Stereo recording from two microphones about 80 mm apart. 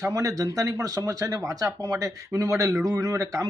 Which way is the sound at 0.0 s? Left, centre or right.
Right.